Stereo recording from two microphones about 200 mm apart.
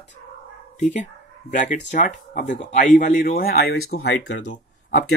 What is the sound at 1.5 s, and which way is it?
Speech, 40° left (ahead or behind).